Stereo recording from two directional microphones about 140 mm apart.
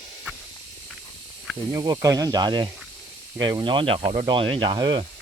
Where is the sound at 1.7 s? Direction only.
25° right (ahead or behind).